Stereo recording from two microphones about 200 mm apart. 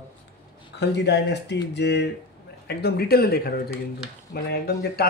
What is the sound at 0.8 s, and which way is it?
Speech, 55° left (ahead or behind).